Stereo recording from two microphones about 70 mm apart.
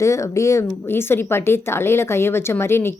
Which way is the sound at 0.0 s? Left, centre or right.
Left.